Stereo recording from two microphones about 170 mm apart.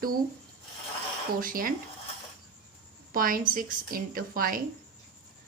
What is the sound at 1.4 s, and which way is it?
Speech, 55° right (ahead or behind).